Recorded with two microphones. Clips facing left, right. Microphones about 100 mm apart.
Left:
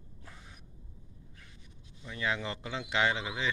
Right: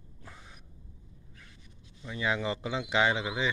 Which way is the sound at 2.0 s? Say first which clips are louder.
Right 3 dB; 10° right (ahead or behind).